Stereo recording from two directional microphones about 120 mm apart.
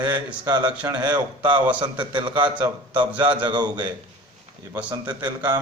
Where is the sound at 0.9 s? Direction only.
35° right (ahead or behind).